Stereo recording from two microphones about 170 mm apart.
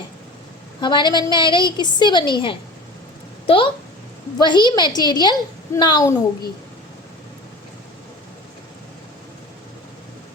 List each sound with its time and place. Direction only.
0.8 s a woman's voice: 25° left (ahead or behind)